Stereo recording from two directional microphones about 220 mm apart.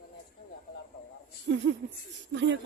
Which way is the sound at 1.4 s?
55° right (ahead or behind).